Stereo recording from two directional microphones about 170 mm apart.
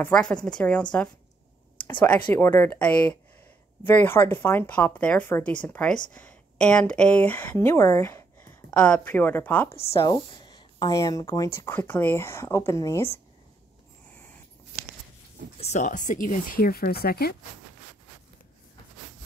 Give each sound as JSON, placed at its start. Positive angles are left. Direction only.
{"t": 0.0, "sound": "a woman's voice", "side_deg": 5}
{"t": 1.9, "sound": "speech", "side_deg": 10}
{"t": 9.9, "sound": "speech", "side_deg": 25}
{"t": 15.6, "sound": "speech", "side_deg": 45}